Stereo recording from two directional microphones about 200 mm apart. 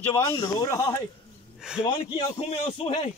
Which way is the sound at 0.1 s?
15° left (ahead or behind).